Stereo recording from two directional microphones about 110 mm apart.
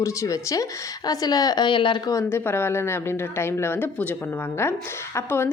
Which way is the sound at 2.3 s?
20° left (ahead or behind).